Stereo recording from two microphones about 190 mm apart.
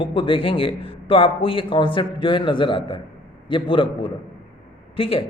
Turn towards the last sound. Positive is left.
turn(degrees=30)  # may be behind; listen again after turning